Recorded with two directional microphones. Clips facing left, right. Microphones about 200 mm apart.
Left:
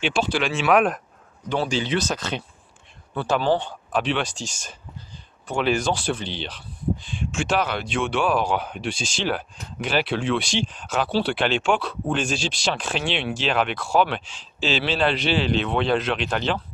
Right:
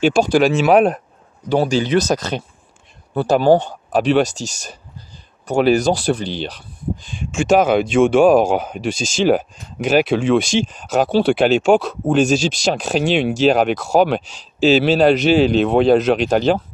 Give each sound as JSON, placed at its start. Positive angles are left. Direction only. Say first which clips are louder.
{"t": 0.0, "sound": "speech", "louder": "right 10 dB", "side_deg": -45}